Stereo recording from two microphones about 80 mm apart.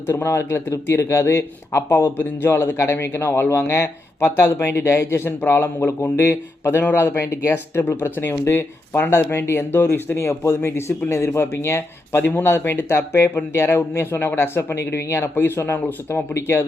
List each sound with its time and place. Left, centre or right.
0.1 s a man's voice: left